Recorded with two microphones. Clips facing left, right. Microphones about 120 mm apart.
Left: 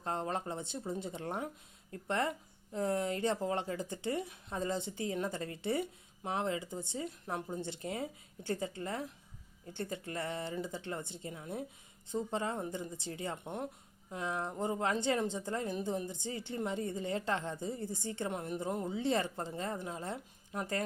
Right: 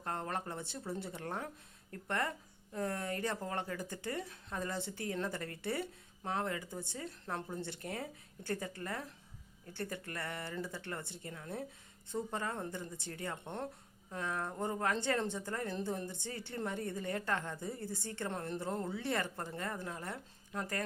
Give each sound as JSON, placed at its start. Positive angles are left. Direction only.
{"t": 0.0, "sound": "a woman's voice", "side_deg": 20}
{"t": 14.1, "sound": "a woman's voice", "side_deg": 20}